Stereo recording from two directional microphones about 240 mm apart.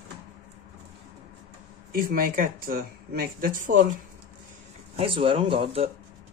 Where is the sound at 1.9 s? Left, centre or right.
Right.